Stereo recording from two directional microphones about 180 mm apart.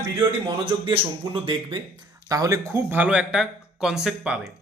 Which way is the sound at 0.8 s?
30° right (ahead or behind).